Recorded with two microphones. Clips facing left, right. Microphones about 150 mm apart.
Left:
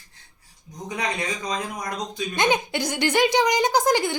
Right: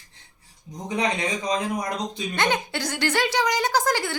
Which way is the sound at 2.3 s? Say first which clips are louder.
Left 3 dB; 15° left (ahead or behind).